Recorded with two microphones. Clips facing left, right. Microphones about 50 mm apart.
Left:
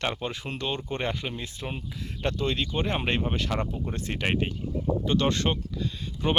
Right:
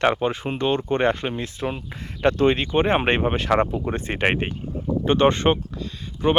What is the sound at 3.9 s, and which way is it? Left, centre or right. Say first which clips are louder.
Speech: right 7 dB; right.